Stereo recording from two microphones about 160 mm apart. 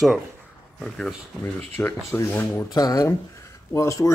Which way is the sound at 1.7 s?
15° left (ahead or behind).